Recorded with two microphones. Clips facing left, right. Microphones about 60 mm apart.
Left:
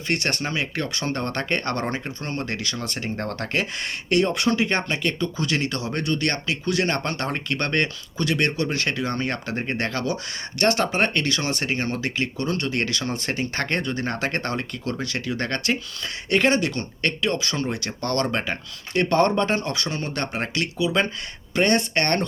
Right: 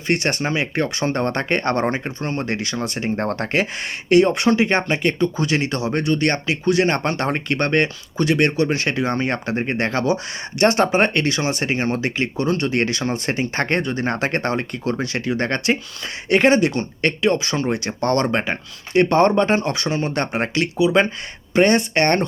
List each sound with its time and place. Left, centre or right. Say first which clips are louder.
0.1 s speech: right 5 dB; right